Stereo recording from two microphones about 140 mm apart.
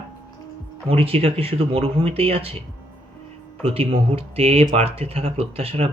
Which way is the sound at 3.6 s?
40° right (ahead or behind).